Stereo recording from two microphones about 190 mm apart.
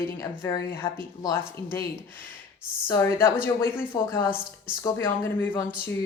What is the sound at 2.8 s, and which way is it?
A woman's voice, 15° left (ahead or behind).